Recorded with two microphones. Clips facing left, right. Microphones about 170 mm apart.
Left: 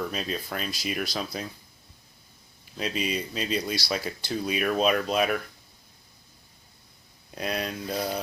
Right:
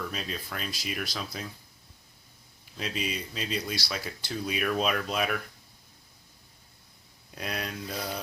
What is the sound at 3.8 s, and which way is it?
Speech, 35° left (ahead or behind).